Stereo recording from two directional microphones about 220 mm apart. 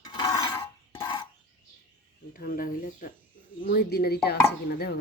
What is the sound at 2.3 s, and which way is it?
Speech, 40° left (ahead or behind).